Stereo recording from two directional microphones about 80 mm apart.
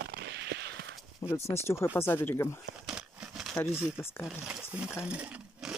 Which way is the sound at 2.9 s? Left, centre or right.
Centre.